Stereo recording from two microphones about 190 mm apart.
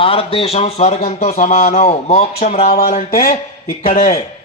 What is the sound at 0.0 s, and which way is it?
A man's voice, 30° left (ahead or behind).